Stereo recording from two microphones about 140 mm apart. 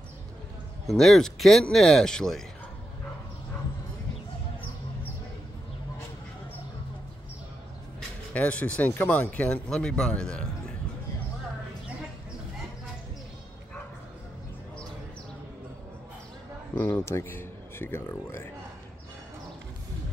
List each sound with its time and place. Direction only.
0.8 s speech: 5° left (ahead or behind)
8.3 s speech: 10° left (ahead or behind)
16.7 s speech: 20° left (ahead or behind)